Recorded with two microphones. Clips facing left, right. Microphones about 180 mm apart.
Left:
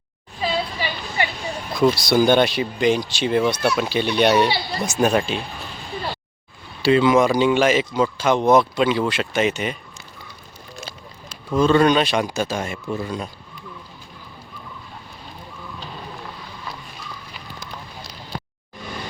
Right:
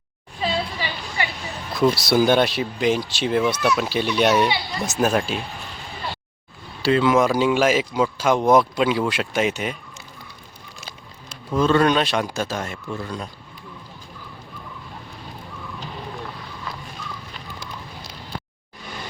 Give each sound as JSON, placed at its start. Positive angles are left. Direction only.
{"t": 1.7, "sound": "speech", "side_deg": -5}
{"t": 4.4, "sound": "speech", "side_deg": 35}
{"t": 4.8, "sound": "speech", "side_deg": 0}
{"t": 6.8, "sound": "speech", "side_deg": 0}
{"t": 11.5, "sound": "speech", "side_deg": 0}